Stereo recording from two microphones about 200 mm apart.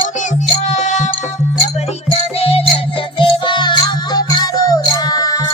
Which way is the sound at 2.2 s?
30° left (ahead or behind).